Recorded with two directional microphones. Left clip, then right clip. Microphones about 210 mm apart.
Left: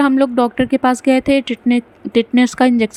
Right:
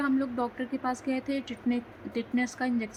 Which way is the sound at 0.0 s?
40° left (ahead or behind).